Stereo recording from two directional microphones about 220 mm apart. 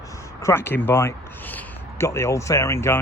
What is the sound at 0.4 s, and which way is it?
Speech, 10° left (ahead or behind).